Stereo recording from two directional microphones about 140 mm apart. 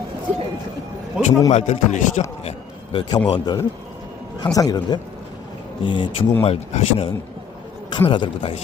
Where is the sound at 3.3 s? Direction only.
30° left (ahead or behind).